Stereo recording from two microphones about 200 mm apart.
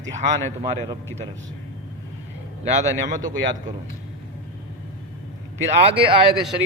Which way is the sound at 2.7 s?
35° right (ahead or behind).